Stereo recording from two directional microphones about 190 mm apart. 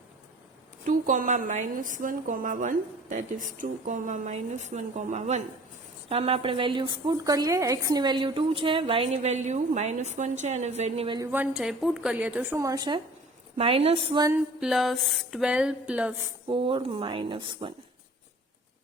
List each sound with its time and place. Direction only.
0.9 s a woman's voice: 45° right (ahead or behind)
11.2 s a woman's voice: 10° right (ahead or behind)
13.6 s a woman's voice: 30° right (ahead or behind)
14.6 s a sound: centre (ahead or behind)
16.5 s a woman's voice: 25° right (ahead or behind)